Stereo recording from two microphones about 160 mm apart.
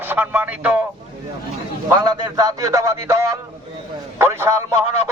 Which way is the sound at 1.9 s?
25° right (ahead or behind).